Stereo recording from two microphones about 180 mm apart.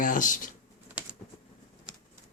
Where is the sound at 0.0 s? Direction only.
50° left (ahead or behind).